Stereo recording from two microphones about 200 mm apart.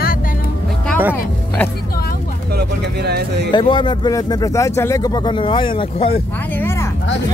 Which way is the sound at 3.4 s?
25° left (ahead or behind).